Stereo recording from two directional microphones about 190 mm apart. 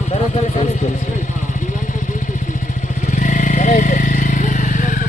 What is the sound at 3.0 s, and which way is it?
Vehicle, 40° left (ahead or behind).